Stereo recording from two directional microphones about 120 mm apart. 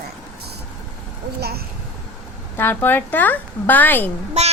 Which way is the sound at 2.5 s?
15° left (ahead or behind).